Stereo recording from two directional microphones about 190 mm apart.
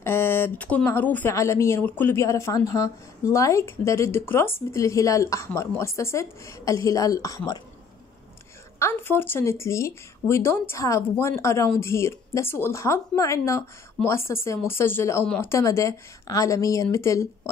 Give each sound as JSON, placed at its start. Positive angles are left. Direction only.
{"t": 0.0, "sound": "speech", "side_deg": 10}
{"t": 8.7, "sound": "speech", "side_deg": 10}